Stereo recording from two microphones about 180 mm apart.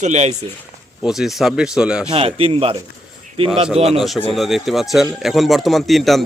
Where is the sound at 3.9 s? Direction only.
Centre (ahead or behind).